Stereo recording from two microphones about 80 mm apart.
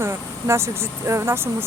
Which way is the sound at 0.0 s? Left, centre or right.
Right.